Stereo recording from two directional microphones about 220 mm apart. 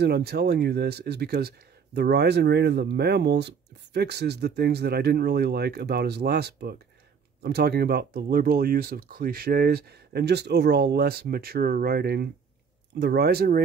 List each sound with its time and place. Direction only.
0.0 s speech: 45° right (ahead or behind)